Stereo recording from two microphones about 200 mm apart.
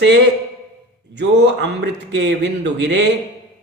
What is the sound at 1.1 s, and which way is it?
A man's voice, 60° right (ahead or behind).